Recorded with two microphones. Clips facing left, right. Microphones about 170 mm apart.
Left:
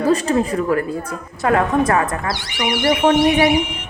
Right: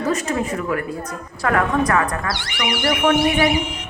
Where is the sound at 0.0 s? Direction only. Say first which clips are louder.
Left 5 dB; 30° left (ahead or behind).